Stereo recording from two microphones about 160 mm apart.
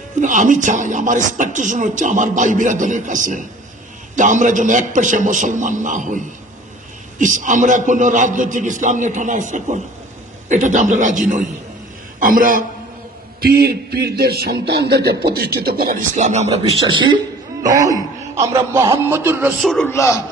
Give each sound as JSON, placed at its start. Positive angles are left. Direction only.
{"t": 0.2, "sound": "a woman's voice", "side_deg": -50}
{"t": 13.4, "sound": "a man's voice", "side_deg": -75}
{"t": 16.2, "sound": "a man's voice", "side_deg": -45}
{"t": 17.6, "sound": "throat clearing", "side_deg": -20}
{"t": 18.3, "sound": "a man's voice", "side_deg": -15}
{"t": 19.6, "sound": "a man's voice", "side_deg": 5}
{"t": 19.9, "sound": "a man's voice", "side_deg": 15}